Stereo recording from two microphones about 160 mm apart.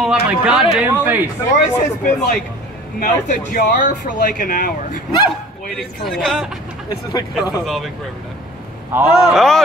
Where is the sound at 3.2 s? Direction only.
55° left (ahead or behind).